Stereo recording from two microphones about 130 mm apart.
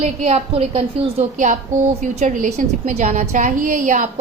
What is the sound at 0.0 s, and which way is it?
A woman's voice, 50° right (ahead or behind).